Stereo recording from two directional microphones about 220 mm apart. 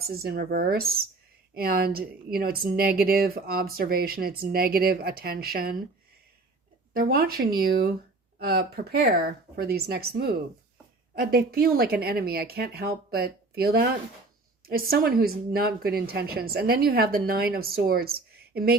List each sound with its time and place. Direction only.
0.1 s a woman's voice: 45° right (ahead or behind)
6.9 s a woman's voice: 40° right (ahead or behind)